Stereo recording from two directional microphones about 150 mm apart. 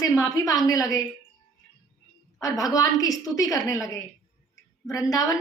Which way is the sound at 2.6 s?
25° left (ahead or behind).